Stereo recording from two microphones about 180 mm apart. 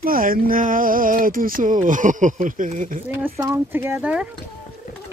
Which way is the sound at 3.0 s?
10° right (ahead or behind).